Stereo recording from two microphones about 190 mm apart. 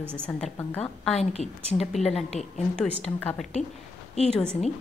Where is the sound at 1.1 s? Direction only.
35° left (ahead or behind).